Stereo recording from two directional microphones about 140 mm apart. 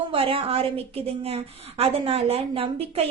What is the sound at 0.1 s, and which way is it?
A woman's voice, 40° right (ahead or behind).